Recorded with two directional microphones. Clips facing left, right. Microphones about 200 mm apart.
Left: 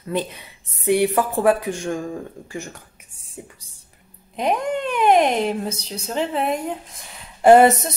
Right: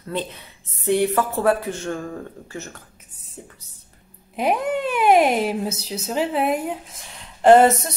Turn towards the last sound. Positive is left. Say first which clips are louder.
# left 1 dB
turn(degrees=10)  # may be behind; listen again after turning